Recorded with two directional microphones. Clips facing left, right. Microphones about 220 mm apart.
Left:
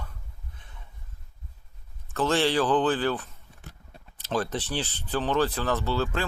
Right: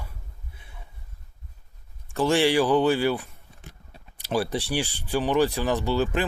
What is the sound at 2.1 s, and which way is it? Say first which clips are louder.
Speech: right 3 dB; 15° right (ahead or behind).